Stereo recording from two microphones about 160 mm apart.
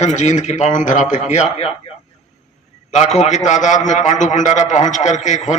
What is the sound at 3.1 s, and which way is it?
A man's voice, 45° left (ahead or behind).